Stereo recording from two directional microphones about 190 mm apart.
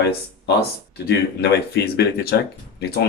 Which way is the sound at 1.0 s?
60° left (ahead or behind).